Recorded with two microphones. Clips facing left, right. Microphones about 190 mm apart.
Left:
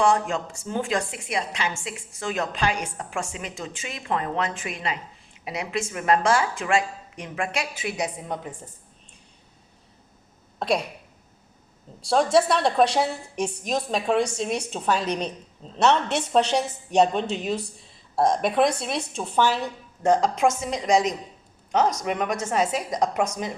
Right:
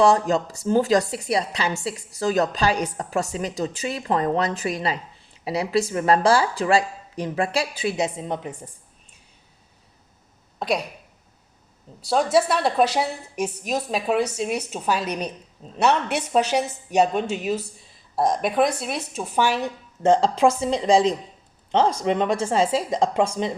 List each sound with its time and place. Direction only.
0.0 s a woman's voice: 35° right (ahead or behind); by 8.5 s 20° right (ahead or behind)
10.6 s speech: centre (ahead or behind)
12.0 s a woman's voice: 5° right (ahead or behind); by 23.6 s 25° right (ahead or behind)